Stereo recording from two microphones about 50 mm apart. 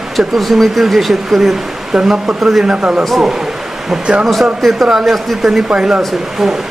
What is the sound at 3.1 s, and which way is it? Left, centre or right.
Speech, centre.